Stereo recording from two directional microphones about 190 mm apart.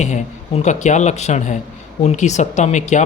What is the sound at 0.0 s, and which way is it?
Speech, 40° left (ahead or behind).